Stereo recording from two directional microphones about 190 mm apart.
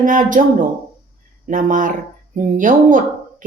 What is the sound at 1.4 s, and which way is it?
Speech, 45° right (ahead or behind).